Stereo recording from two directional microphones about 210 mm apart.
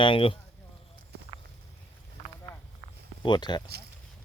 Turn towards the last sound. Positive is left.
turn(degrees=20)  # may be behind; listen again after turning